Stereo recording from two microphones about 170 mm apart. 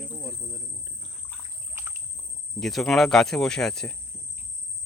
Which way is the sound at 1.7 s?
15° right (ahead or behind).